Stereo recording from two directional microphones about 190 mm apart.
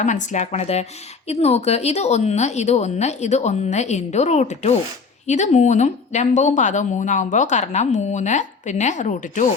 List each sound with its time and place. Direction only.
0.0 s speech: 40° left (ahead or behind)